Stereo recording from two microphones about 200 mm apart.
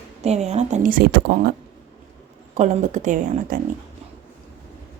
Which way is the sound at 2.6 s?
40° right (ahead or behind).